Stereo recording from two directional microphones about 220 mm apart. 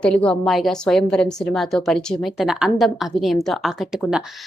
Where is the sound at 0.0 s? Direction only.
5° left (ahead or behind).